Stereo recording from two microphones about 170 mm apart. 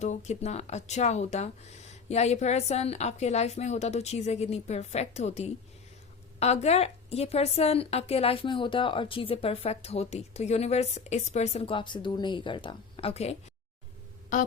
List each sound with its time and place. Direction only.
0.0 s a woman's voice: 45° left (ahead or behind)